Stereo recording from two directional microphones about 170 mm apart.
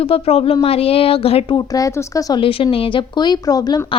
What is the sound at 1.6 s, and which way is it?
A woman's voice, 20° left (ahead or behind).